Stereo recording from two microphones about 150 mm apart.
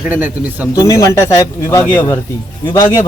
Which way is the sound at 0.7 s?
20° left (ahead or behind).